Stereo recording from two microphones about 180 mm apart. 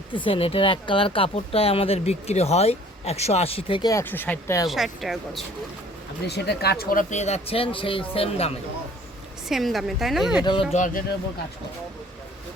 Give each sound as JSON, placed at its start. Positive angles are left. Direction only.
{"t": 0.1, "sound": "speech", "side_deg": 30}
{"t": 4.7, "sound": "a woman's voice", "side_deg": 0}
{"t": 6.2, "sound": "speech", "side_deg": 65}
{"t": 7.1, "sound": "speech", "side_deg": 40}
{"t": 9.5, "sound": "a woman's voice", "side_deg": 0}
{"t": 10.4, "sound": "speech", "side_deg": 25}
{"t": 10.8, "sound": "speech", "side_deg": 45}